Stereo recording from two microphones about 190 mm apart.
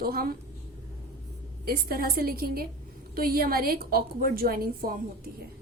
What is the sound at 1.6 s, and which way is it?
A woman's voice, 50° right (ahead or behind).